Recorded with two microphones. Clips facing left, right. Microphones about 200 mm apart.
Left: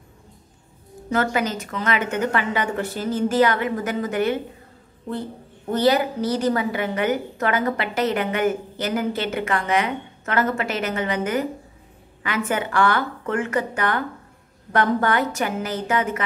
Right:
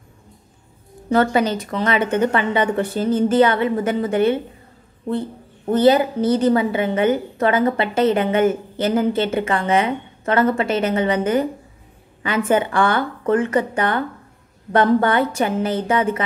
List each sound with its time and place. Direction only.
1.1 s a woman's voice: 30° right (ahead or behind)
5.7 s a woman's voice: 30° right (ahead or behind)
12.4 s a woman's voice: 30° right (ahead or behind)